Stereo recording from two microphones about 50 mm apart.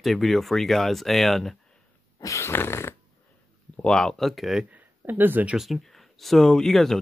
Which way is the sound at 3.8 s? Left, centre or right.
Centre.